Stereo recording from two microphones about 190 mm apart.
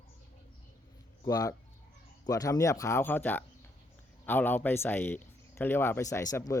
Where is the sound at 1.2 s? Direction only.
20° left (ahead or behind).